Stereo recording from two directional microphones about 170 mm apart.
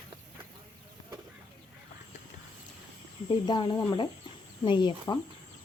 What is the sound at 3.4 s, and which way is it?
Speech, 25° left (ahead or behind).